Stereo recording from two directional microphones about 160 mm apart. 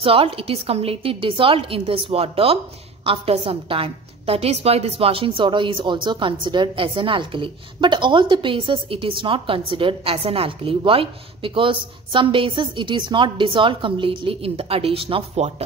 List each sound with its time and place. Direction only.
0.0 s a woman's voice: 35° right (ahead or behind)